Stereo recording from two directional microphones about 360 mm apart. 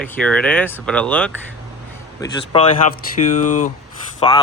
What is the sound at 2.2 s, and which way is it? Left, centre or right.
Speech, centre.